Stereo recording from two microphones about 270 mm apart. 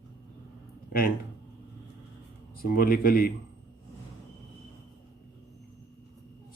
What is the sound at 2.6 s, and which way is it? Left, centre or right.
Speech, left.